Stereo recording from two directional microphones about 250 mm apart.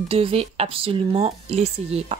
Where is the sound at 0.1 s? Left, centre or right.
Right.